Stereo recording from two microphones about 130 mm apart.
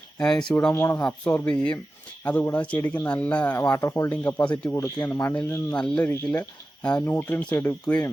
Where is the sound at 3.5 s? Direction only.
25° left (ahead or behind).